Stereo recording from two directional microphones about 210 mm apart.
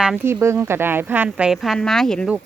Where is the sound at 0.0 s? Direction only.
5° right (ahead or behind).